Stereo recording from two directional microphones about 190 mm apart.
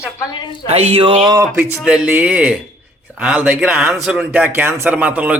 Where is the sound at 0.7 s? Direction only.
35° right (ahead or behind).